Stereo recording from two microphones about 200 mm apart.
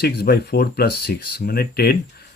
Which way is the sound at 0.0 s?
55° left (ahead or behind).